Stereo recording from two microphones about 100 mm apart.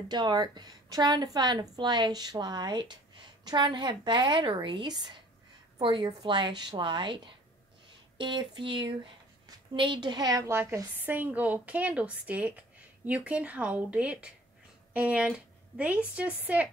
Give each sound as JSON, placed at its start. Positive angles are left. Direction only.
{"t": 0.1, "sound": "a woman's voice", "side_deg": -45}
{"t": 10.5, "sound": "a woman's voice", "side_deg": -25}